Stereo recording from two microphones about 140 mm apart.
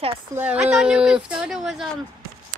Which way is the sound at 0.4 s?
10° right (ahead or behind).